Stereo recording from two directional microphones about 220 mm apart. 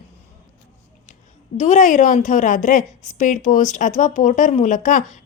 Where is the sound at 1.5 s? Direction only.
35° left (ahead or behind).